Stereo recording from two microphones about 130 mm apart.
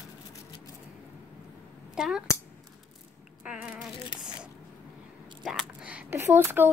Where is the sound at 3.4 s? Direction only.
10° right (ahead or behind).